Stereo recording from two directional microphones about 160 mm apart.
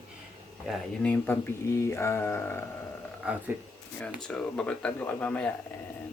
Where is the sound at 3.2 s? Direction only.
5° right (ahead or behind).